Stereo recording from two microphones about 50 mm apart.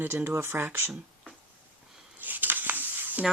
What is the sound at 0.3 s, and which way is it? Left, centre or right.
Speech, right.